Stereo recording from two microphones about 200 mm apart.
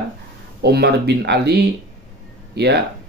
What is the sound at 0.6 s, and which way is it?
Speech, 55° right (ahead or behind).